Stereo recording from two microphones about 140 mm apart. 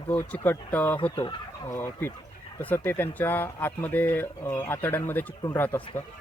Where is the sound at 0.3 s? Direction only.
10° left (ahead or behind).